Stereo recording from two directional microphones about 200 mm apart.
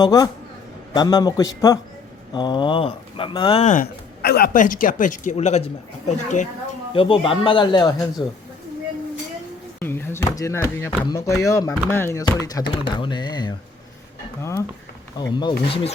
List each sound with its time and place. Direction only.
0.0 s speech: 20° left (ahead or behind); by 3.8 s 35° left (ahead or behind)
4.2 s speech: 50° left (ahead or behind)
6.9 s speech: 25° left (ahead or behind)
9.8 s speech: 10° left (ahead or behind)
15.2 s speech: 20° left (ahead or behind)